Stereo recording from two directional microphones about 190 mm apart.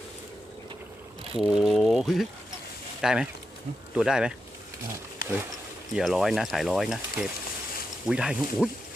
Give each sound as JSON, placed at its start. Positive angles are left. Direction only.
{"t": 1.4, "sound": "speech", "side_deg": 0}
{"t": 5.9, "sound": "speech", "side_deg": 0}